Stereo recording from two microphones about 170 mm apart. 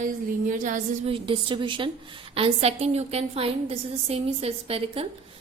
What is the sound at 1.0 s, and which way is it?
A woman's voice, 30° right (ahead or behind).